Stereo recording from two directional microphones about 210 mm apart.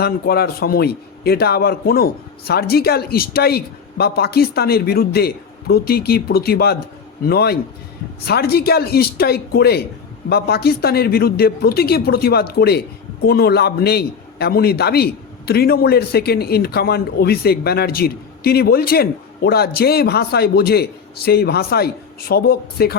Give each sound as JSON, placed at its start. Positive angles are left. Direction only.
{"t": 0.0, "sound": "a man's voice", "side_deg": 50}